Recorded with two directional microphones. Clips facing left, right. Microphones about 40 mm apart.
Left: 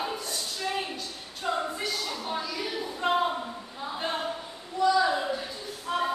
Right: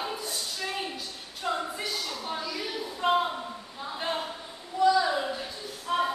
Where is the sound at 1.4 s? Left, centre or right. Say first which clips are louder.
Left 1 dB; centre.